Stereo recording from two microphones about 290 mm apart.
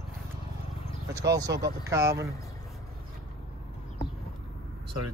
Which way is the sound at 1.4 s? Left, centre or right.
Right.